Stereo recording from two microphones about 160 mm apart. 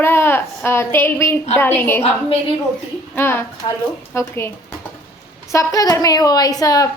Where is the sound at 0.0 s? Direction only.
15° left (ahead or behind).